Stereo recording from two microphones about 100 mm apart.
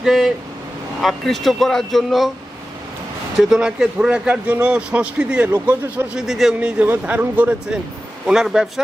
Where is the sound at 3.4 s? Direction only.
5° right (ahead or behind).